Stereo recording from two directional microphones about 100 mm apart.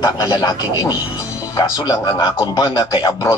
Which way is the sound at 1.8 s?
40° left (ahead or behind).